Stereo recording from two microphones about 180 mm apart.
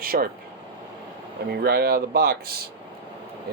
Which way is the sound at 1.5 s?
60° right (ahead or behind).